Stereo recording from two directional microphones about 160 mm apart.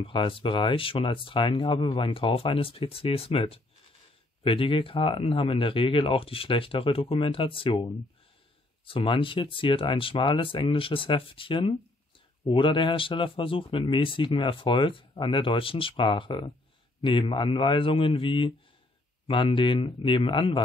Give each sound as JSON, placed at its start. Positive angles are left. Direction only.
{"t": 0.0, "sound": "speech", "side_deg": 30}
{"t": 8.8, "sound": "speech", "side_deg": 35}